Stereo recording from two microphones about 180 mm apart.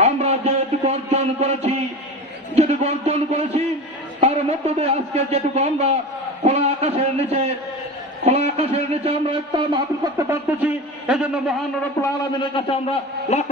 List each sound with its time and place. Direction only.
0.0 s a sound: 35° right (ahead or behind)
0.8 s a man's voice: 35° right (ahead or behind)
10.1 s a man's voice: 10° right (ahead or behind)
12.0 s a man's voice: 25° left (ahead or behind)